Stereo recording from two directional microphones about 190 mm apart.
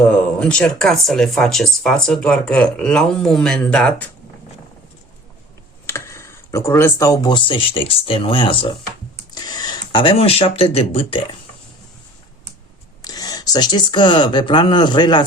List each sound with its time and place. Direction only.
0.1 s speech: 5° left (ahead or behind)
5.8 s speech: 15° left (ahead or behind); by 11.2 s 30° left (ahead or behind)
13.0 s speech: 20° left (ahead or behind)